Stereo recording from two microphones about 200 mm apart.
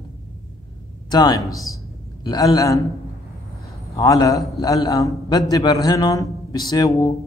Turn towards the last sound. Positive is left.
turn(degrees=20)  # may be behind; listen again after turning